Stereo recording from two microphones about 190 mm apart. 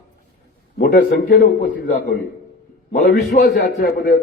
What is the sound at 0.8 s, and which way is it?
Speech, 45° left (ahead or behind).